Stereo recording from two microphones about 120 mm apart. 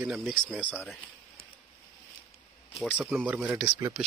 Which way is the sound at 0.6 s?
10° left (ahead or behind).